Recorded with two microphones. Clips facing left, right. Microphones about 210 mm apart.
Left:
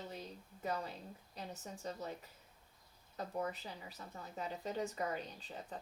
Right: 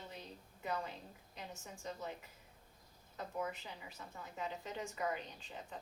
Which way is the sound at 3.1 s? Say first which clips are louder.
Left 2 dB; 35° left (ahead or behind).